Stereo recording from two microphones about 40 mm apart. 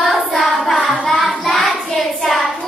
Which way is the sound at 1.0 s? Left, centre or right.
Left.